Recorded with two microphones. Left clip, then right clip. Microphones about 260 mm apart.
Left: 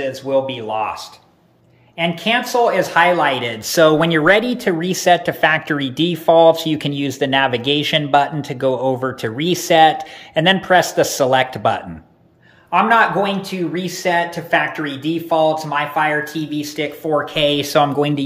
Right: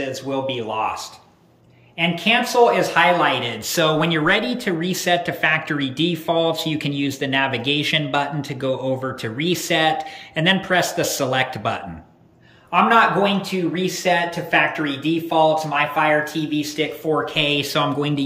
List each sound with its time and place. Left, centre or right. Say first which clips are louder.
0.0 s speech: left 6 dB; centre
2.0 s speech: left 1 dB; centre